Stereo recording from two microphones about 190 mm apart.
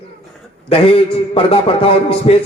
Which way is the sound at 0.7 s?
30° left (ahead or behind).